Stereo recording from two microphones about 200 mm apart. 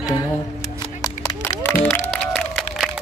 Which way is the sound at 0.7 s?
15° left (ahead or behind).